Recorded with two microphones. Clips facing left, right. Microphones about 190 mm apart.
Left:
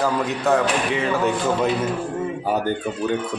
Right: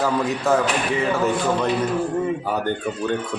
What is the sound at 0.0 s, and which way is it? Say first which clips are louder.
Speech: even; centre (ahead or behind).